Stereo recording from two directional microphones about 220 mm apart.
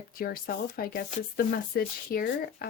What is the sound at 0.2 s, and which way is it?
Speech, 40° left (ahead or behind).